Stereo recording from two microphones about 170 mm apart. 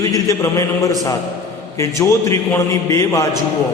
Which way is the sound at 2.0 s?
20° left (ahead or behind).